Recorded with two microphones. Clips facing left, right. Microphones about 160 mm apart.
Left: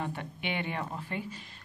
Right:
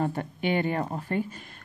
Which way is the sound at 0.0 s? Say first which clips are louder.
Right 8 dB; 40° right (ahead or behind).